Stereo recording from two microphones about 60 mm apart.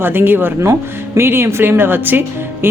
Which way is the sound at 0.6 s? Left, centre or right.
Right.